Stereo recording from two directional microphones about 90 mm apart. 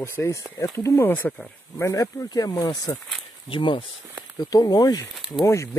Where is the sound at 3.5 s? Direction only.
70° left (ahead or behind).